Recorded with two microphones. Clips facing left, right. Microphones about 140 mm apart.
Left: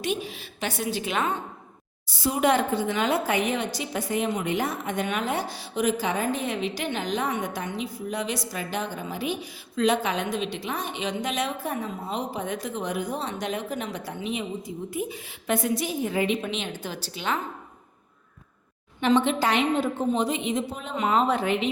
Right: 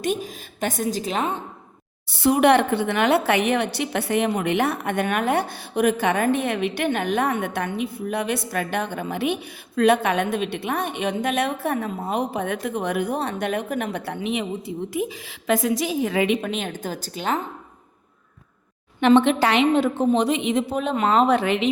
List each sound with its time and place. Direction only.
0.0 s a woman's voice: 45° right (ahead or behind)
2.0 s a woman's voice: 60° right (ahead or behind)
14.9 s a woman's voice: 90° right; by 17.4 s 45° right (ahead or behind)
18.9 s a woman's voice: 65° right (ahead or behind)